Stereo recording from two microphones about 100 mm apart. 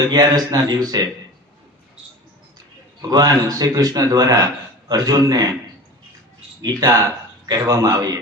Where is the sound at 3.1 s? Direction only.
40° right (ahead or behind).